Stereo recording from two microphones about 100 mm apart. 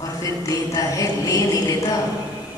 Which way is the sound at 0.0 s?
35° left (ahead or behind).